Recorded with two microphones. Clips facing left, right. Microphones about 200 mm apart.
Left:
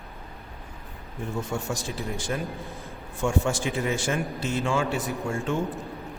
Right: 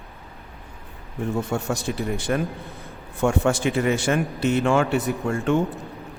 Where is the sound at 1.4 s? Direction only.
65° right (ahead or behind).